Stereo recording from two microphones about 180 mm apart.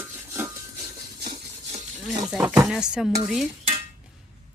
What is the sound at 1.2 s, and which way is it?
Rub, 65° right (ahead or behind).